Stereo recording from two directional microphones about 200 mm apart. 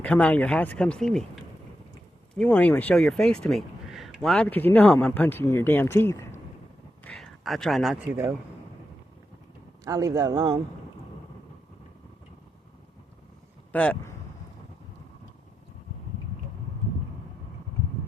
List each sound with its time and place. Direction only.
0.0 s speech: 5° left (ahead or behind)
2.3 s a man's voice: 5° left (ahead or behind); by 8.4 s 15° right (ahead or behind)
9.8 s speech: 15° right (ahead or behind)
13.7 s speech: 10° left (ahead or behind)